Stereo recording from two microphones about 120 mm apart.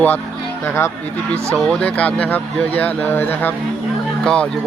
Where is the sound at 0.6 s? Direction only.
20° left (ahead or behind).